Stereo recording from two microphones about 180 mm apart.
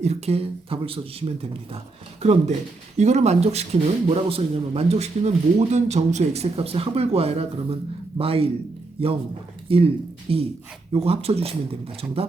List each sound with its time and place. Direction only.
0.0 s a man's voice: 35° right (ahead or behind)